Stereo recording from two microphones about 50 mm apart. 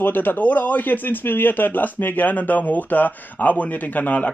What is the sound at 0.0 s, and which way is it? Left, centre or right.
Speech, left.